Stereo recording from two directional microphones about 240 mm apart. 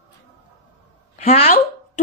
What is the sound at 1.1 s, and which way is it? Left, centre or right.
Speech, left.